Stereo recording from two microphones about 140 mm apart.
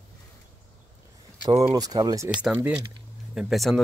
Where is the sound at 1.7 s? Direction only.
25° right (ahead or behind).